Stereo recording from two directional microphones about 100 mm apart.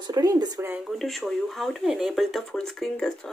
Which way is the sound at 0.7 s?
Centre (ahead or behind).